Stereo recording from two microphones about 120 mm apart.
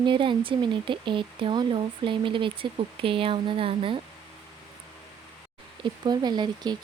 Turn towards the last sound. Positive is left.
turn(degrees=-35)  # may be behind; listen again after turning